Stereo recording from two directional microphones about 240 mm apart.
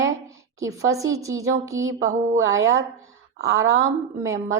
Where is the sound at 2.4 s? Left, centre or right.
Right.